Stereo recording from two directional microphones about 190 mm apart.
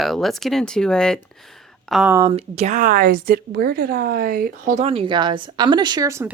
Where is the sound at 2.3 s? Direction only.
35° right (ahead or behind).